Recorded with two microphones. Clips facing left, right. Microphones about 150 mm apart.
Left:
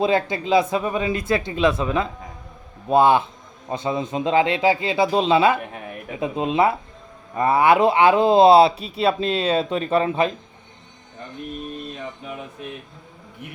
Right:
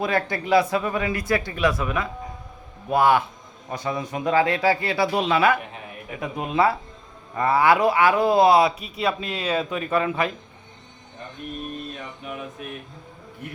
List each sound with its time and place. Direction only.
0.0 s speech: 20° left (ahead or behind)